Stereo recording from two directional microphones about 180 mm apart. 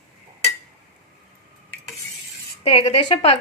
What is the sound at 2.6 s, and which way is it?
Speech, 35° left (ahead or behind).